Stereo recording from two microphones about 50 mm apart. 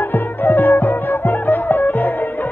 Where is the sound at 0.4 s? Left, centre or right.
Left.